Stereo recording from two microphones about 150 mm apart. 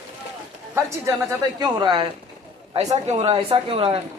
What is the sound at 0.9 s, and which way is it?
A woman's voice, 20° right (ahead or behind).